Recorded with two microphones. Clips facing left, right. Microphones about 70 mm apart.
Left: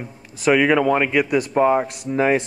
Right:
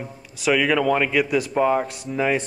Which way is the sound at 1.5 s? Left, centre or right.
Centre.